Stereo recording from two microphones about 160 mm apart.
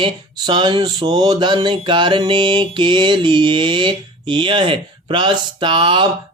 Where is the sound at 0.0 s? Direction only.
30° right (ahead or behind).